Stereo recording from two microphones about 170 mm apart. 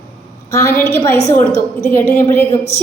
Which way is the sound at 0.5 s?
15° left (ahead or behind).